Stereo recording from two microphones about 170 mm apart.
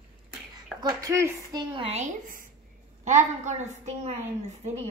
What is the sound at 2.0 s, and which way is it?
A woman's voice, 50° right (ahead or behind).